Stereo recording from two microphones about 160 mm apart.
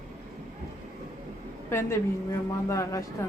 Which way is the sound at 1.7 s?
15° left (ahead or behind).